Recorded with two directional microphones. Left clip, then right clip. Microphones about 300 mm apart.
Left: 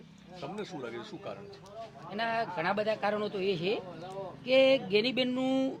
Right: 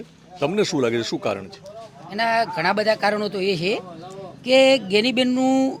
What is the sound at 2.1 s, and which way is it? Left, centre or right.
A man's voice, right.